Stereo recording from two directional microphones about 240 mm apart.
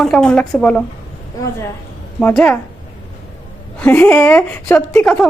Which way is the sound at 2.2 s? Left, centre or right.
Centre.